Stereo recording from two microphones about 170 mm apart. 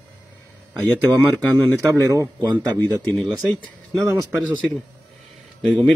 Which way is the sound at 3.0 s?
10° left (ahead or behind).